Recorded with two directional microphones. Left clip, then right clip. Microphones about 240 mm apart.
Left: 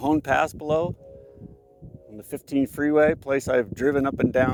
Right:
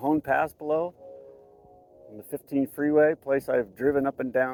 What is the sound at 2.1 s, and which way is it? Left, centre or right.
Speech, left.